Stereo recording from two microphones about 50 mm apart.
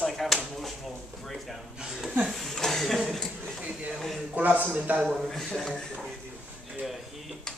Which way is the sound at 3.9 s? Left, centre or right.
Centre.